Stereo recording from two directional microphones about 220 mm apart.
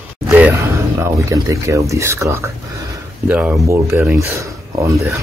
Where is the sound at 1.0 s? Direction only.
15° right (ahead or behind).